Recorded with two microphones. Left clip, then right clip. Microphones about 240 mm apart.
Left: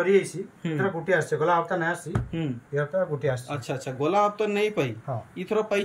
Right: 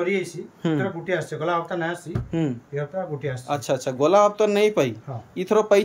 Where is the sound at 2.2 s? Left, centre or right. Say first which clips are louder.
Right 10 dB; centre.